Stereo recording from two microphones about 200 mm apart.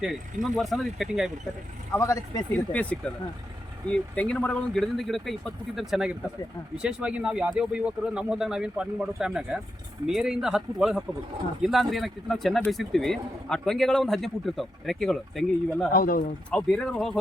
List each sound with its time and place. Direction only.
0.4 s speech: centre (ahead or behind)
1.9 s speech: 15° left (ahead or behind)
15.9 s speech: 45° left (ahead or behind)
16.5 s speech: 5° left (ahead or behind)